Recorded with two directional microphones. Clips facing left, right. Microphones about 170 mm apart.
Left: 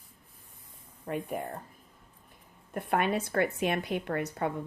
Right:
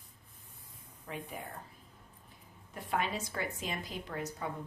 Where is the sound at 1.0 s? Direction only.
50° left (ahead or behind).